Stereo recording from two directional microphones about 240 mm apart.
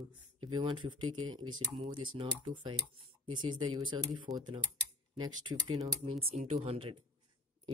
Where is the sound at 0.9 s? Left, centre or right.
Right.